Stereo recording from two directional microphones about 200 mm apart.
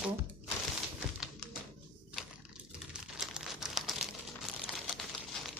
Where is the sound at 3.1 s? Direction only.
5° right (ahead or behind).